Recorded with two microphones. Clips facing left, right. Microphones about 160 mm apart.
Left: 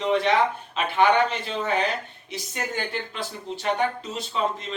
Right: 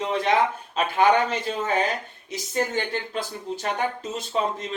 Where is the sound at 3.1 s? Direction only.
45° right (ahead or behind).